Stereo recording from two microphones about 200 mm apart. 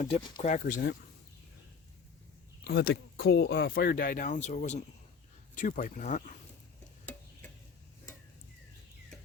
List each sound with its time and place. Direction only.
0.4 s speech: 40° left (ahead or behind)
2.6 s speech: 60° left (ahead or behind)
3.7 s speech: 50° left (ahead or behind)
7.0 s a sound: 10° left (ahead or behind)